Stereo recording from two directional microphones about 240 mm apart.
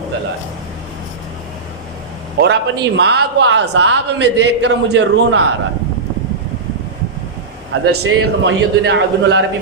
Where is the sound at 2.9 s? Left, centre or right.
Right.